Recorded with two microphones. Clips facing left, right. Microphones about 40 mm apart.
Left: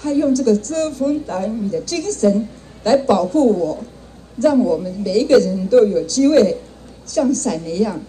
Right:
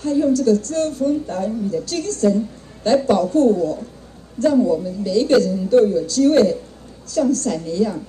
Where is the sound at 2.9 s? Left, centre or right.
Left.